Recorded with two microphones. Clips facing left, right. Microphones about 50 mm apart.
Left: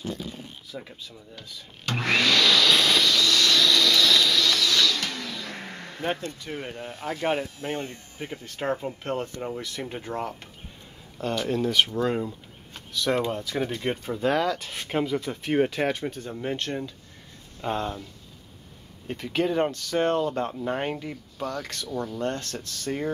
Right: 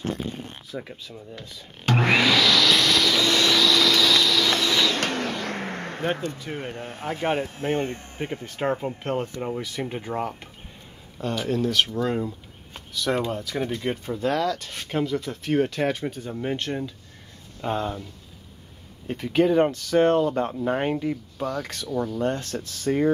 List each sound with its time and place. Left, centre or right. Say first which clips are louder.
0.0 s speech: right 4 dB; right
2.0 s speech: right 1 dB; centre
2.4 s vehicle: right 1 dB; centre
3.1 s vehicle: right 1 dB; right
3.5 s a sound: right 2 dB; centre
4.5 s a sound: right 1 dB; right
4.9 s vehicle: right 6 dB; right
6.4 s speech: right 2 dB; centre
6.7 s speech: right 2 dB; right
8.5 s speech: right 2 dB; centre
11.1 s speech: right 1 dB; centre
16.1 s speech: right 2 dB; centre
19.0 s speech: right 5 dB; centre